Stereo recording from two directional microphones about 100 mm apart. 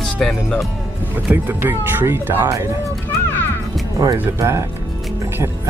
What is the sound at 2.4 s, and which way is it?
Speech, 35° right (ahead or behind).